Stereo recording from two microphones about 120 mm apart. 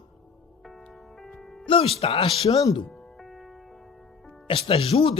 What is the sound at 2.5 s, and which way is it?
Speech, 30° left (ahead or behind).